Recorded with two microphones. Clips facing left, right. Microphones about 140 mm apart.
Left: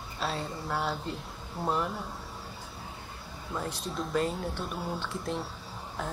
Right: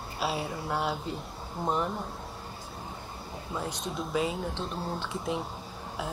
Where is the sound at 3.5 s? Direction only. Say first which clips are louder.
Even; 5° right (ahead or behind).